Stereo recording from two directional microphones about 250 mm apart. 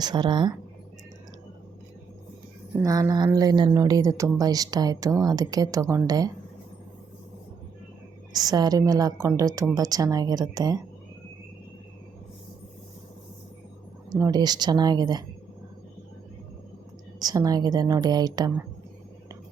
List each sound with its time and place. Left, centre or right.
0.0 s speech: centre
2.7 s speech: centre
8.3 s speech: centre
14.1 s speech: centre
17.2 s speech: centre